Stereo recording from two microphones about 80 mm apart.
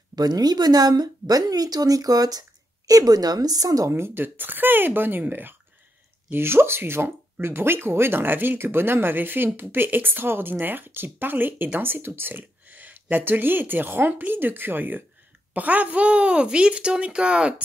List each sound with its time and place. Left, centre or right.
0.1 s speech: right
3.9 s speech: right; by 17.6 s centre